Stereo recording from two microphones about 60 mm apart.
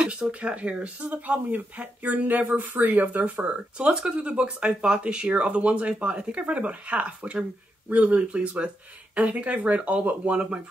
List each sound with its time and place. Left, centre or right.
0.0 s speech: centre